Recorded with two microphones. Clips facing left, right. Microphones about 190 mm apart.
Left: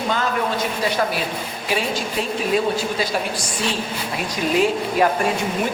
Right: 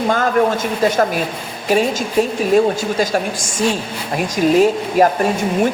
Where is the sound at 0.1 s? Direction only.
50° right (ahead or behind).